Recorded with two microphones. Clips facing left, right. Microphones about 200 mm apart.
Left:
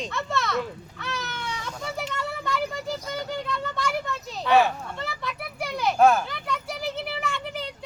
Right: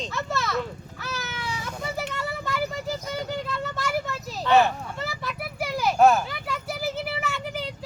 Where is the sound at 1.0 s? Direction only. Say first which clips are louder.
Even; 5° right (ahead or behind).